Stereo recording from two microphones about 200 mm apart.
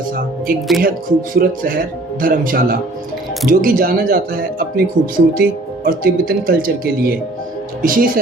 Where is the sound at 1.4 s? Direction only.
45° right (ahead or behind).